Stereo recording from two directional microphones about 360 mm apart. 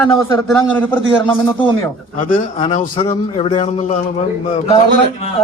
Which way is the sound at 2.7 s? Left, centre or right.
Centre.